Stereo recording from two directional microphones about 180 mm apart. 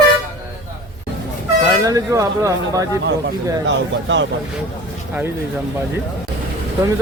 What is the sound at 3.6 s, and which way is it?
Speech, 90° right.